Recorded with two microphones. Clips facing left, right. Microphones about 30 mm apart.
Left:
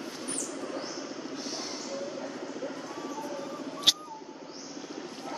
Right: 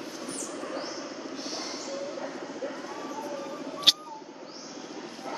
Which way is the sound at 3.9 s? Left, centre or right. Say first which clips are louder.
Right 3 dB; right.